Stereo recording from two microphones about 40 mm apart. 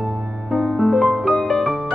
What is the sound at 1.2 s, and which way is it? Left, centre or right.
Music, centre.